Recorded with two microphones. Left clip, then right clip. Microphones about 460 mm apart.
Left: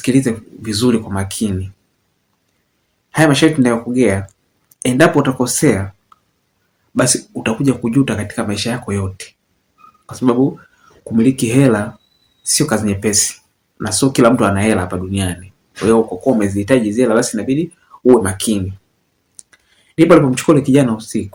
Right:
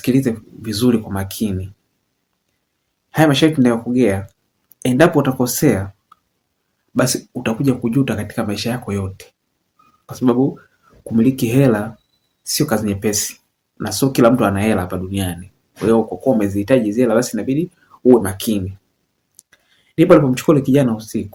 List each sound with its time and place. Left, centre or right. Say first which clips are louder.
0.0 s speech: left 2 dB; right
3.1 s speech: left 2 dB; right